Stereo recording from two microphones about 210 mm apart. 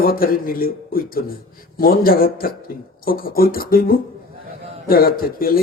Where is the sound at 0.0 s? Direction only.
45° left (ahead or behind).